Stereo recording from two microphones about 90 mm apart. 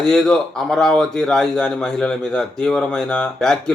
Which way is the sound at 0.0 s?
5° left (ahead or behind).